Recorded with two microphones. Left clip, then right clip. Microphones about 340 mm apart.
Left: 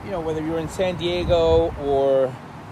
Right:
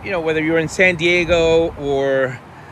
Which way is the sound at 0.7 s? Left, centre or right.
Right.